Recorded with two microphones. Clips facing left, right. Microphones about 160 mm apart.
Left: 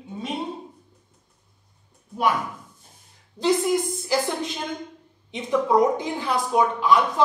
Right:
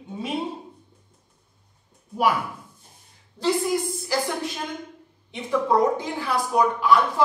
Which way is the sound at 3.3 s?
20° left (ahead or behind).